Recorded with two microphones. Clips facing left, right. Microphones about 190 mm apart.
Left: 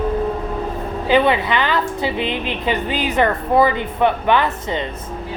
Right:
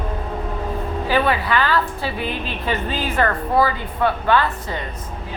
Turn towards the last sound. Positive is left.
turn(degrees=20)  # may be behind; listen again after turning